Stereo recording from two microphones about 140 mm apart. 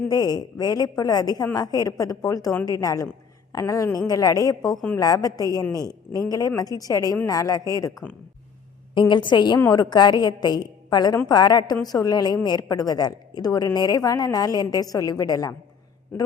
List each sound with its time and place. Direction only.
0.1 s a woman's voice: 30° left (ahead or behind)
9.0 s a woman's voice: 35° left (ahead or behind)
16.1 s a man's voice: 15° left (ahead or behind)